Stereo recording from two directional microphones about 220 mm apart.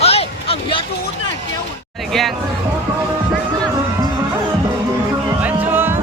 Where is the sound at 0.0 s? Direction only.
25° left (ahead or behind).